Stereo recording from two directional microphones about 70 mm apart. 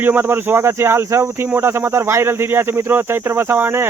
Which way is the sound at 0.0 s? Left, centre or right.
Right.